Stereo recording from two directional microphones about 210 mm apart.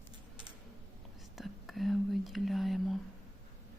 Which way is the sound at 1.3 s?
Centre (ahead or behind).